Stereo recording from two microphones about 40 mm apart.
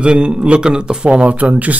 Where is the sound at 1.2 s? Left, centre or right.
Right.